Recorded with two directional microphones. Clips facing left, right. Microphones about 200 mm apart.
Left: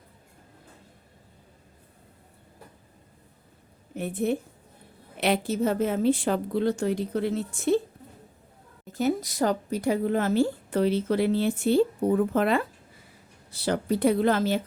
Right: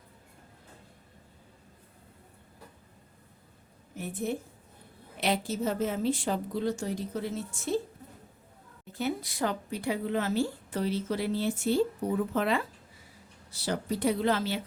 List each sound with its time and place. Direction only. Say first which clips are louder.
3.9 s a woman's voice: left 6 dB; 65° left (ahead or behind)
8.9 s a woman's voice: left 6 dB; 45° left (ahead or behind)